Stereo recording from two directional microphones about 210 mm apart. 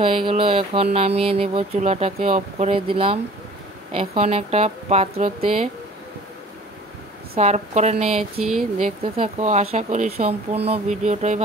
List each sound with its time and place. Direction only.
0.0 s speech: 25° right (ahead or behind)
7.3 s speech: 35° right (ahead or behind)